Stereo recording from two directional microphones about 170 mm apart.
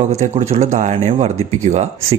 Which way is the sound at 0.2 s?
40° right (ahead or behind).